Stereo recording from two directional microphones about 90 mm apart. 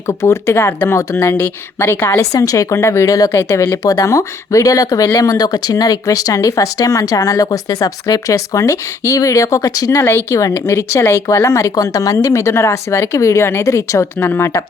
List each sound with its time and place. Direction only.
0.1 s speech: 35° left (ahead or behind)